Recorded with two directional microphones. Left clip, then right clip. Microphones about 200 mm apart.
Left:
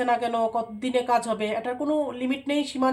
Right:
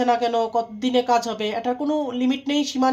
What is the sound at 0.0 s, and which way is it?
Speech, 35° right (ahead or behind).